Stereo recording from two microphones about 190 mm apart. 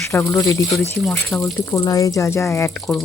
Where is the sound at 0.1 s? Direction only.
15° left (ahead or behind).